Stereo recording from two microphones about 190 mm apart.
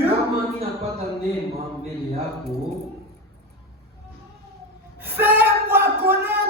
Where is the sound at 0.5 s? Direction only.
30° right (ahead or behind).